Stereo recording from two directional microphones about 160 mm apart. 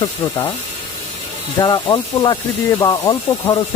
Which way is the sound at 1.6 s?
25° left (ahead or behind).